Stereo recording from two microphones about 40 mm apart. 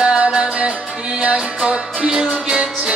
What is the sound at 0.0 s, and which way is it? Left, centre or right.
Music, centre.